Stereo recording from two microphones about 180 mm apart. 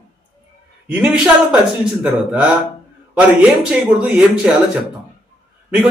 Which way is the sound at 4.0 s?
5° right (ahead or behind).